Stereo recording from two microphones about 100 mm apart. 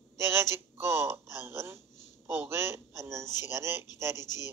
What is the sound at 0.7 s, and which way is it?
Speech, 20° right (ahead or behind).